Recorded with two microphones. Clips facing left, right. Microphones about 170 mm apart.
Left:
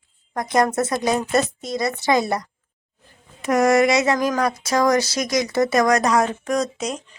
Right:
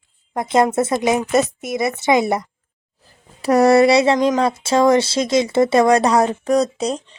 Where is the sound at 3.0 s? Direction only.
35° right (ahead or behind).